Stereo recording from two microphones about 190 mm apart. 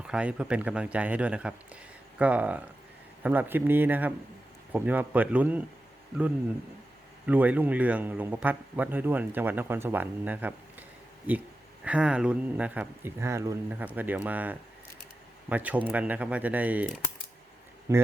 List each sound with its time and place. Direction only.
0.0 s a man's voice: 5° right (ahead or behind)
7.3 s a man's voice: 10° right (ahead or behind)